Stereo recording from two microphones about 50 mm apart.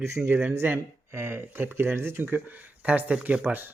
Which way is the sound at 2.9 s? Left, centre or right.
Right.